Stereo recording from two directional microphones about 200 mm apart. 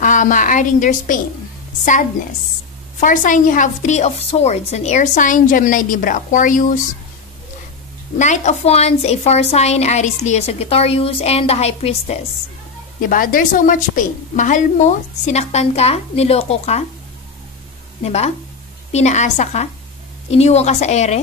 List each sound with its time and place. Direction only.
0.0 s a woman's voice: 40° left (ahead or behind)
3.0 s a woman's voice: 40° left (ahead or behind)
8.2 s a woman's voice: 35° left (ahead or behind)
13.1 s a woman's voice: 45° left (ahead or behind)
18.0 s a woman's voice: 35° left (ahead or behind)